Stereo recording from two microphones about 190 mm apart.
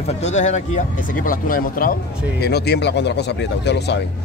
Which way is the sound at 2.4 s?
60° left (ahead or behind).